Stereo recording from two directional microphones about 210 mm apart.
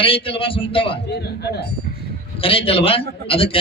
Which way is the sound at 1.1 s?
50° left (ahead or behind).